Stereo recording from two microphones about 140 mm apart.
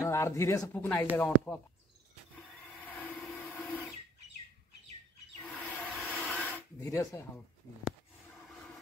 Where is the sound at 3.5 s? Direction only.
10° left (ahead or behind).